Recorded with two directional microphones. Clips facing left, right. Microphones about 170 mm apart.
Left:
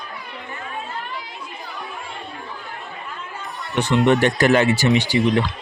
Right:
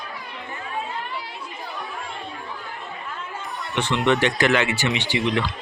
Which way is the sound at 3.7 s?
40° left (ahead or behind).